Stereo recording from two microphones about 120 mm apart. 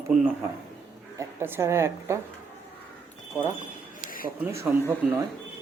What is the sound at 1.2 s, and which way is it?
A woman's voice, 20° right (ahead or behind).